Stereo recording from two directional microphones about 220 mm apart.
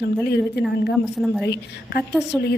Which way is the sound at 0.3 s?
45° left (ahead or behind).